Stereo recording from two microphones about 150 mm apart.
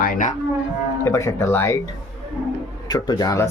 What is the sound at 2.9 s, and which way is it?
Speech, 25° left (ahead or behind).